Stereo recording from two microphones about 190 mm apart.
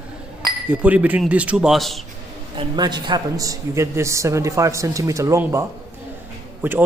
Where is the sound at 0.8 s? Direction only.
5° right (ahead or behind).